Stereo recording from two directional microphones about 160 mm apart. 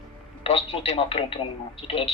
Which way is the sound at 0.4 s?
40° left (ahead or behind).